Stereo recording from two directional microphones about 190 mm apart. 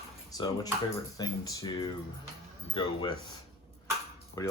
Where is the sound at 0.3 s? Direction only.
20° left (ahead or behind).